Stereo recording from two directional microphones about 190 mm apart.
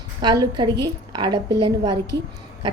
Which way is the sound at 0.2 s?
20° right (ahead or behind).